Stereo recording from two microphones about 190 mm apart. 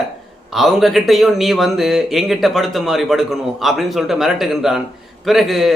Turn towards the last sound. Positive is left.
turn(degrees=0)  # may be behind; listen again after turning